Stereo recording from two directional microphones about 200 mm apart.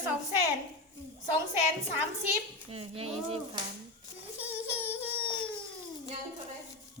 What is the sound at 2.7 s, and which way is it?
Speech, 30° right (ahead or behind).